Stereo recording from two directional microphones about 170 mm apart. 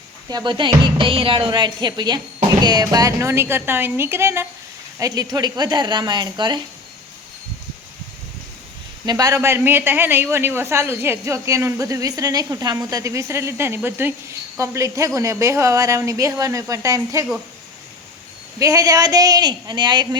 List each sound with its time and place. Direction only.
0.3 s speech: 25° right (ahead or behind)
9.0 s speech: 20° right (ahead or behind)
18.6 s speech: 20° right (ahead or behind)